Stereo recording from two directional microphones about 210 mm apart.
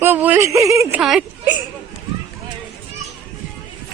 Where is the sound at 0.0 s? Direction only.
10° right (ahead or behind).